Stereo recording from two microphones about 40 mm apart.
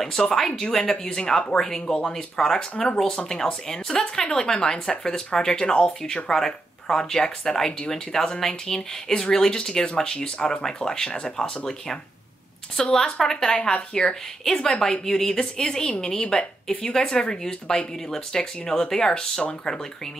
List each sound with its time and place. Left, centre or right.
0.0 s speech: centre
2.7 s speech: left
3.6 s speech: centre